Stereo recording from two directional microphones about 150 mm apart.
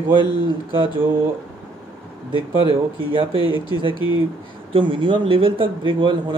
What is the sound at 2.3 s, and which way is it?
Speech, 35° right (ahead or behind).